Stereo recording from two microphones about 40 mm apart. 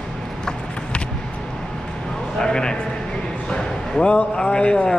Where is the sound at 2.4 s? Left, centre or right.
Centre.